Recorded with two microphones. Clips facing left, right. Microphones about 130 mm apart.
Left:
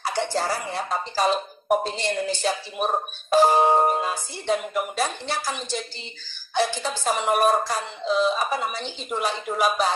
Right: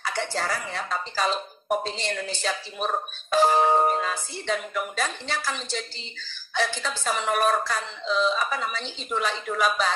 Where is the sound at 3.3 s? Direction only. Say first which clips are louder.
Left 3 dB; 40° left (ahead or behind).